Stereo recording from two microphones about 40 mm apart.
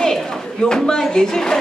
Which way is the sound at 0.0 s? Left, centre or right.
Centre.